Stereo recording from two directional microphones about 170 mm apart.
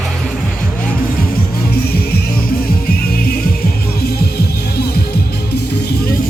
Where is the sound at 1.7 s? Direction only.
65° left (ahead or behind).